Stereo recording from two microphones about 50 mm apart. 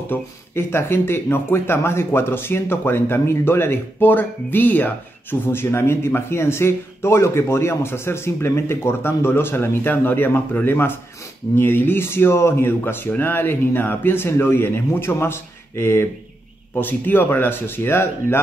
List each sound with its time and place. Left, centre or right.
0.1 s speech: left
16.7 s speech: left